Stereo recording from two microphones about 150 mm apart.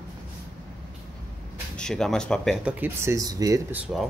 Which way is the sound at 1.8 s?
5° left (ahead or behind).